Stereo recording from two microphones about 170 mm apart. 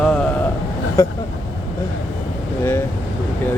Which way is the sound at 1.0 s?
15° left (ahead or behind).